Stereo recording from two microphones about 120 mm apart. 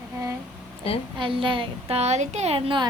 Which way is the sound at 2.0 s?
70° right (ahead or behind).